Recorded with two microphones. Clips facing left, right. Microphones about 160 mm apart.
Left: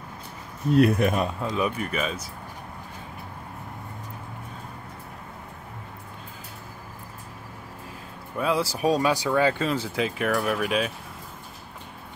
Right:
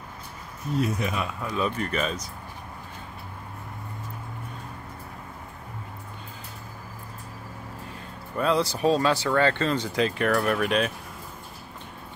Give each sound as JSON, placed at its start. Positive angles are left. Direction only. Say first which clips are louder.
{"t": 0.7, "sound": "speech", "louder": "left 7 dB", "side_deg": 60}
{"t": 1.2, "sound": "speech", "louder": "left 2 dB", "side_deg": 25}
{"t": 1.8, "sound": "speech", "louder": "right 1 dB", "side_deg": 5}
{"t": 8.4, "sound": "speech", "louder": "right 1 dB", "side_deg": 5}